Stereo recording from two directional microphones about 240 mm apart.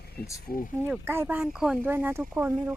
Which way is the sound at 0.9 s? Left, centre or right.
Centre.